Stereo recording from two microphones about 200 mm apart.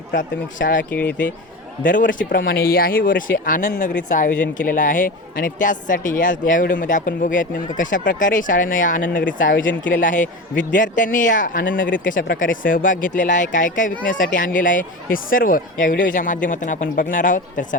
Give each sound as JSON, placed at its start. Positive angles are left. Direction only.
{"t": 0.2, "sound": "speech", "side_deg": 40}
{"t": 0.9, "sound": "speech", "side_deg": 10}
{"t": 1.8, "sound": "speech", "side_deg": 45}